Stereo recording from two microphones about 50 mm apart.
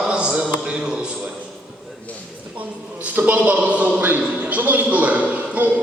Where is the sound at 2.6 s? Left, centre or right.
Right.